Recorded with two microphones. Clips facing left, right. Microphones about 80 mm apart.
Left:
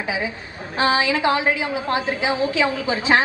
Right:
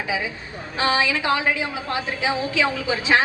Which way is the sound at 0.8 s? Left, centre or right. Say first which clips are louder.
Left 3 dB; left.